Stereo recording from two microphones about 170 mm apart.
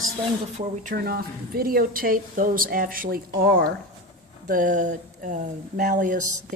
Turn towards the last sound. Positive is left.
turn(degrees=-50)  # may be behind; listen again after turning